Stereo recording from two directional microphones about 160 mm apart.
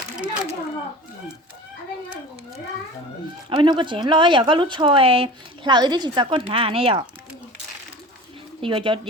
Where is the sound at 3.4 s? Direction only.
30° right (ahead or behind).